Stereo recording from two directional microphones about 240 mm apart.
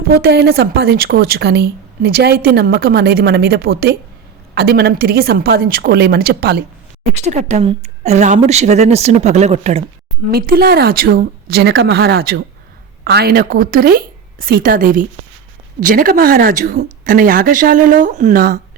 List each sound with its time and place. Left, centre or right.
0.1 s a woman's voice: right
7.2 s a woman's voice: right
10.3 s a woman's voice: right